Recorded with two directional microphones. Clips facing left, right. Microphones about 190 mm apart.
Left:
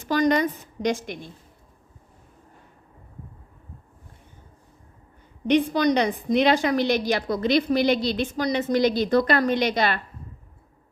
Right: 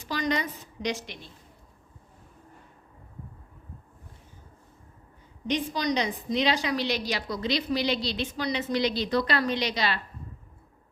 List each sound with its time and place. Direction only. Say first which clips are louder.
0.0 s a woman's voice: left 8 dB; 50° left (ahead or behind)
5.5 s a woman's voice: left 8 dB; 60° left (ahead or behind)